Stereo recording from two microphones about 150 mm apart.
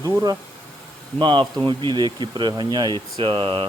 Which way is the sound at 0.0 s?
25° right (ahead or behind).